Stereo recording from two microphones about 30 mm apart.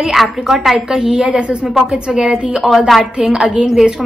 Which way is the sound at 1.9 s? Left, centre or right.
Right.